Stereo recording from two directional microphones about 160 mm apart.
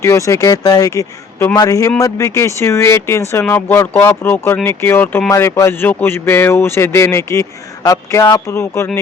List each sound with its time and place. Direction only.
0.0 s speech: 20° left (ahead or behind)